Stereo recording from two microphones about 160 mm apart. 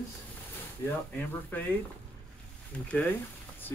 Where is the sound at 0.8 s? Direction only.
20° left (ahead or behind).